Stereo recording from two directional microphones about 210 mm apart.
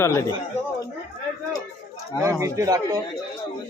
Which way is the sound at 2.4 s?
15° right (ahead or behind).